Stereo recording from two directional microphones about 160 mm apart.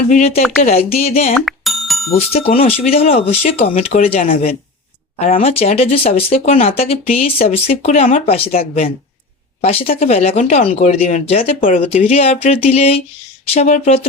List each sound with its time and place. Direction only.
0.1 s speech: 40° left (ahead or behind)
1.3 s music: centre (ahead or behind)
2.1 s speech: 40° left (ahead or behind)